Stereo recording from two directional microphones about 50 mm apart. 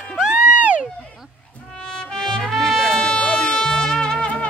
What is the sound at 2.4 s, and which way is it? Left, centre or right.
Music, centre.